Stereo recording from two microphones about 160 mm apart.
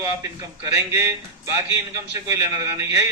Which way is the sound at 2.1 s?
20° right (ahead or behind).